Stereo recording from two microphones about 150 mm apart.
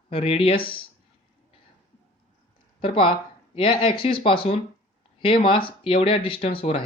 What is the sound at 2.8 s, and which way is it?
Speech, 35° left (ahead or behind).